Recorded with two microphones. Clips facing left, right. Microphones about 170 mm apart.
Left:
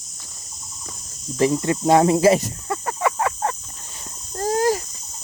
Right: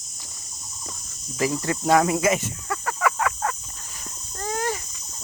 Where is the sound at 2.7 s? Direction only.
25° left (ahead or behind).